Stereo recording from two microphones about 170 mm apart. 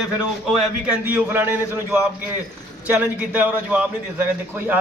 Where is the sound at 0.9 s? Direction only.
10° right (ahead or behind).